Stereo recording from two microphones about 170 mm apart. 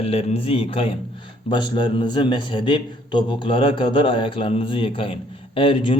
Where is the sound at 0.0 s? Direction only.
35° left (ahead or behind).